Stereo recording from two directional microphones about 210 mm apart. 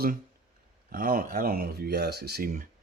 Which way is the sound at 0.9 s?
40° right (ahead or behind).